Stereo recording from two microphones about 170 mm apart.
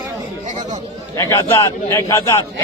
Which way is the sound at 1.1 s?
20° left (ahead or behind).